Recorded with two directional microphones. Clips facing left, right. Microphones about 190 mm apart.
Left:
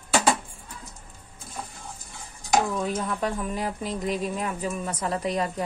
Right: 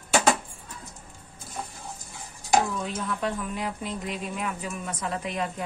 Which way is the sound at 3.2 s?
40° left (ahead or behind).